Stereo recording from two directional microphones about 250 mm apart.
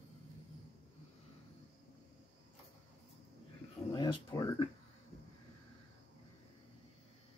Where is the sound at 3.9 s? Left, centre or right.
Centre.